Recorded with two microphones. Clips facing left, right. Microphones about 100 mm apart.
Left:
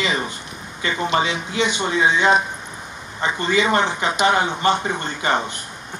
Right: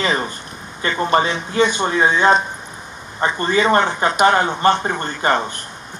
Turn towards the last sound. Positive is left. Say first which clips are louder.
# right 3 dB
turn(degrees=-45)  # may be behind; listen again after turning